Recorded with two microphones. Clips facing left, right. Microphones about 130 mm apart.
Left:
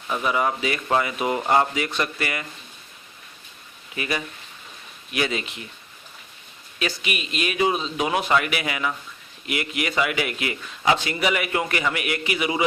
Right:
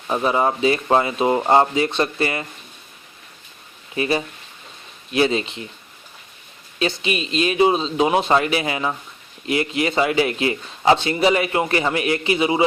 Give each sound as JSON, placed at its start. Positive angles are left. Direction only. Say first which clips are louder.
{"t": 0.1, "sound": "speech", "louder": "right 4 dB", "side_deg": -30}
{"t": 3.9, "sound": "speech", "louder": "right 7 dB", "side_deg": -30}
{"t": 6.7, "sound": "speech", "louder": "right 6 dB", "side_deg": -30}